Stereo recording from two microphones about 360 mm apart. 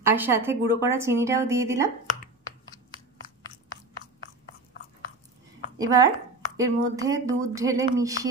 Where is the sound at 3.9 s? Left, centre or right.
Left.